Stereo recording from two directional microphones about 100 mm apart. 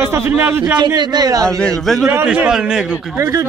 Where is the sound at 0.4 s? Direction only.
20° right (ahead or behind).